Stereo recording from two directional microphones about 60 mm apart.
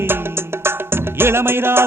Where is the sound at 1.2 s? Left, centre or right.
Right.